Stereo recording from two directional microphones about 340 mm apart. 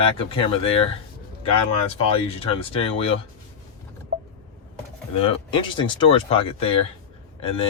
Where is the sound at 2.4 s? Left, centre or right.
Centre.